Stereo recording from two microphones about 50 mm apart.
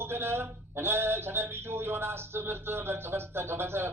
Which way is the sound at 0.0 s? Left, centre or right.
Right.